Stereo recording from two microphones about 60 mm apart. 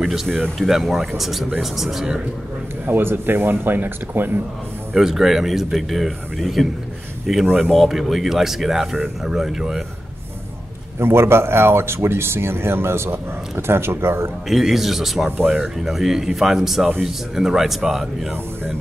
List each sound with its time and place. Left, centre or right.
0.0 s speech: centre
2.9 s speech: right
4.9 s speech: centre
11.0 s speech: right
14.5 s speech: centre